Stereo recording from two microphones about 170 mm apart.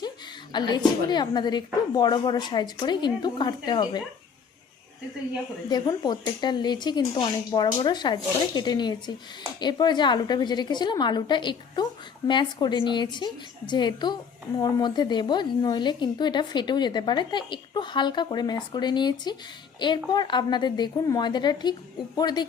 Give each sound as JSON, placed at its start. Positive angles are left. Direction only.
{"t": 0.5, "sound": "speech", "side_deg": 25}
{"t": 5.6, "sound": "speech", "side_deg": 25}